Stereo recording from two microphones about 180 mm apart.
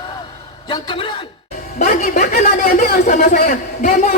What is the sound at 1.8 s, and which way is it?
A man's voice, 45° left (ahead or behind).